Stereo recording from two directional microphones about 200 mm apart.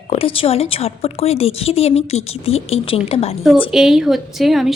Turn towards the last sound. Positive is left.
turn(degrees=0)  # may be behind; listen again after turning